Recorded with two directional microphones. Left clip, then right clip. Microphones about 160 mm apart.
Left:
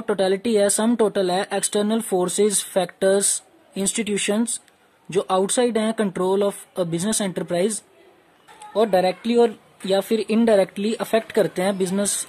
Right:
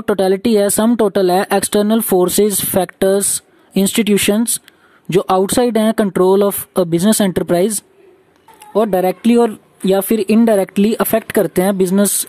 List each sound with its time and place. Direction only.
0.0 s speech: 50° right (ahead or behind)
8.7 s speech: 40° right (ahead or behind)